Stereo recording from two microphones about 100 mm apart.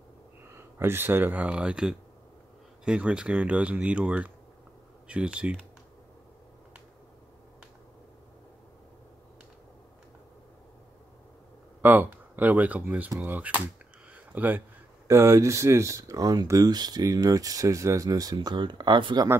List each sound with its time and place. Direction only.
0.6 s speech: 25° right (ahead or behind)
11.8 s speech: 15° right (ahead or behind)
14.1 s a sound: 15° right (ahead or behind)
15.0 s speech: 30° right (ahead or behind); by 19.2 s 50° right (ahead or behind)